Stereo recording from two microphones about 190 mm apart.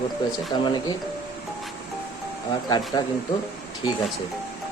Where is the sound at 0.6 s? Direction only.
25° left (ahead or behind).